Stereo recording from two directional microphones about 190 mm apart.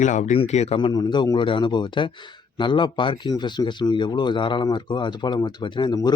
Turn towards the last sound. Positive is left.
turn(degrees=20)  # may be behind; listen again after turning